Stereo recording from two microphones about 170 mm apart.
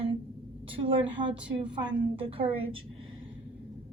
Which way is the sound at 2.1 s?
30° right (ahead or behind).